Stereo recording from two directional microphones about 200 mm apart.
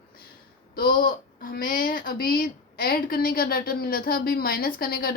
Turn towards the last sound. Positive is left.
turn(degrees=50)  # may be behind; listen again after turning